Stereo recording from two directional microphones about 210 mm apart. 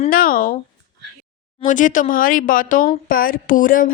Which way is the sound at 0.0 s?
40° left (ahead or behind).